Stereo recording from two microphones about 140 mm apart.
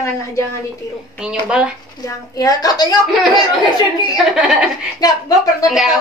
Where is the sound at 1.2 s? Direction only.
5° right (ahead or behind).